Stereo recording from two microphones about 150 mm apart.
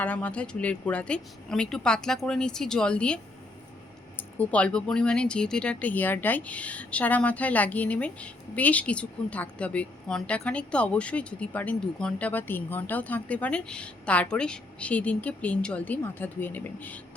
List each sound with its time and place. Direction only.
0.0 s speech: 10° left (ahead or behind)
4.2 s speech: 10° left (ahead or behind)